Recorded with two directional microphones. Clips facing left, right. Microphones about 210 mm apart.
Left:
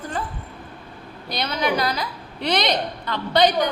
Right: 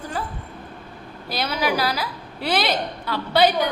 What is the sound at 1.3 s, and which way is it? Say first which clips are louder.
A woman's voice: even; 5° right (ahead or behind).